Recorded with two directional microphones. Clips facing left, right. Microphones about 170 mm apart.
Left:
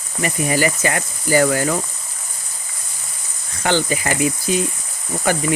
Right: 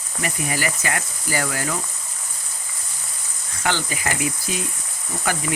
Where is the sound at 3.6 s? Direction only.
25° left (ahead or behind).